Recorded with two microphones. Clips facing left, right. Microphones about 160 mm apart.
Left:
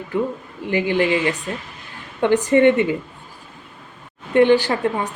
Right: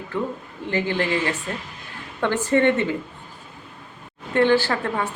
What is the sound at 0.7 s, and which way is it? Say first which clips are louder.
A woman's voice: left 5 dB; 15° left (ahead or behind).